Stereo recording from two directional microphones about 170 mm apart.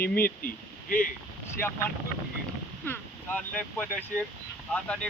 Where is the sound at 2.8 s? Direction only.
10° left (ahead or behind).